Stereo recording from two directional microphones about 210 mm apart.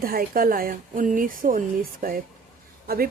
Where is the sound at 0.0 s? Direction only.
45° right (ahead or behind).